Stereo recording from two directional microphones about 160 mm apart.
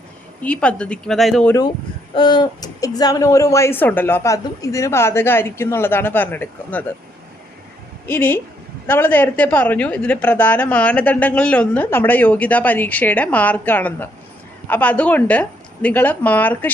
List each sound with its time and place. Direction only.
0.4 s a woman's voice: 5° left (ahead or behind)
2.1 s a woman's voice: 30° left (ahead or behind); by 6.8 s 10° left (ahead or behind)
8.0 s a woman's voice: 15° left (ahead or behind)